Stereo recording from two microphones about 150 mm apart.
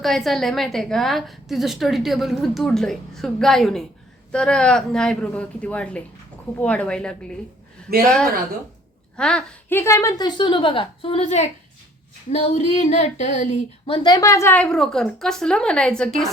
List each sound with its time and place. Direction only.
0.0 s a woman's voice: centre (ahead or behind); by 13.9 s 50° left (ahead or behind)
13.9 s a woman's voice: 25° left (ahead or behind); by 16.3 s 5° left (ahead or behind)